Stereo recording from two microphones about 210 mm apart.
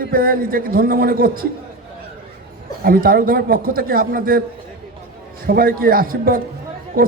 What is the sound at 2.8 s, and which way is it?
Speech, 45° right (ahead or behind).